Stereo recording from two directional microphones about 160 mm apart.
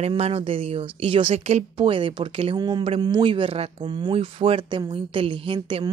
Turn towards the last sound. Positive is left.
turn(degrees=-30)  # may be behind; listen again after turning